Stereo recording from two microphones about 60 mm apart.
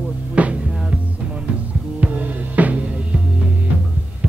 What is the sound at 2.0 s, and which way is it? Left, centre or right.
Music, right.